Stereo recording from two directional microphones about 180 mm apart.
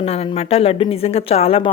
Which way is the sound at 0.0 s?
35° left (ahead or behind).